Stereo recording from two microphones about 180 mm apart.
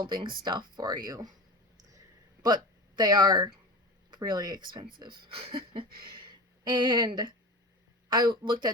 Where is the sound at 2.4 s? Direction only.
25° right (ahead or behind).